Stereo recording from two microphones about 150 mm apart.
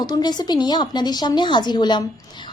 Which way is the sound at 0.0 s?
25° left (ahead or behind).